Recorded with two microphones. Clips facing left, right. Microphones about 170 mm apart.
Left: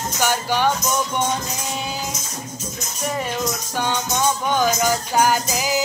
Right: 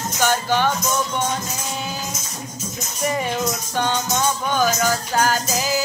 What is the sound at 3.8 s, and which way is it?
Music, 15° left (ahead or behind).